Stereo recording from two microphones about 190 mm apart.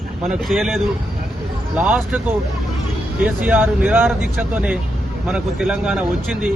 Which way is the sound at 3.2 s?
10° right (ahead or behind).